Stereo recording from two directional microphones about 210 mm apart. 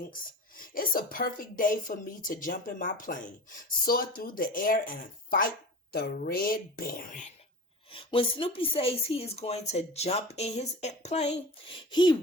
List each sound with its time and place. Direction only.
0.7 s a woman's voice: 45° left (ahead or behind)
5.9 s a woman's voice: 45° left (ahead or behind)
7.9 s a woman's voice: 25° left (ahead or behind)